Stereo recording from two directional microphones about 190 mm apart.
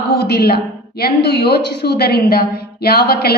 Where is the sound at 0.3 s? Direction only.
55° left (ahead or behind).